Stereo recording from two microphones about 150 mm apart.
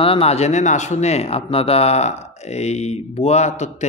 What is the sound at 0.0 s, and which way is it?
Speech, 40° left (ahead or behind).